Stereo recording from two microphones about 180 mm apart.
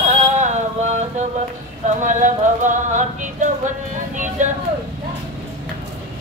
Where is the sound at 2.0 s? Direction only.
45° right (ahead or behind).